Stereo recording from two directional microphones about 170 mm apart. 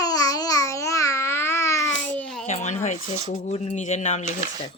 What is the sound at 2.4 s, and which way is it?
Speech, 45° left (ahead or behind).